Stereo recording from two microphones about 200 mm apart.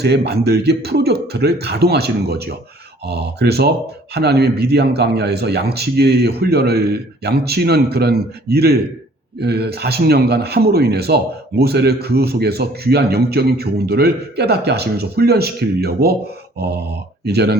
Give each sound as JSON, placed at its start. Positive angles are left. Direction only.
{"t": 0.0, "sound": "a man's voice", "side_deg": -55}